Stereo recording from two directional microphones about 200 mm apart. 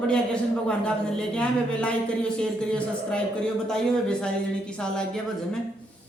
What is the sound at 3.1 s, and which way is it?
A man's voice, 5° left (ahead or behind).